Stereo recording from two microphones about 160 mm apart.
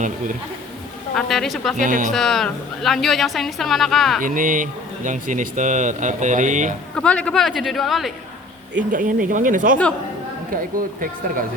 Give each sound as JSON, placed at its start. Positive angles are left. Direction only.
{"t": 1.1, "sound": "a woman's voice", "side_deg": 0}
{"t": 1.8, "sound": "speech", "side_deg": -55}
{"t": 2.1, "sound": "a woman's voice", "side_deg": 0}
{"t": 4.2, "sound": "speech", "side_deg": -55}
{"t": 6.9, "sound": "a woman's voice", "side_deg": 5}
{"t": 8.9, "sound": "speech", "side_deg": -55}